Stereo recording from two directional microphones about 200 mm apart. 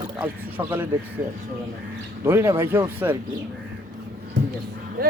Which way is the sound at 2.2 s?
15° right (ahead or behind).